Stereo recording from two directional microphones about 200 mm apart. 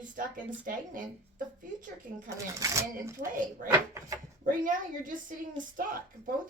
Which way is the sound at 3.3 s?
40° right (ahead or behind).